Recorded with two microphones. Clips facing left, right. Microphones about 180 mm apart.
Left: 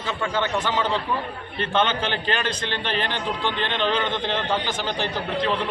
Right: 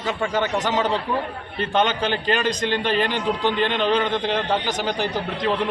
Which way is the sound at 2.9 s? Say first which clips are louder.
Right 3 dB; 10° right (ahead or behind).